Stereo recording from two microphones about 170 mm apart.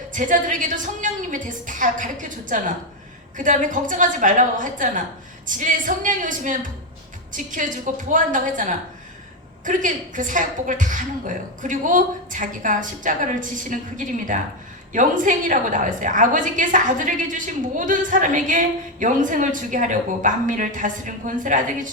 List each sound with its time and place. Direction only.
0.1 s a woman's voice: 50° right (ahead or behind)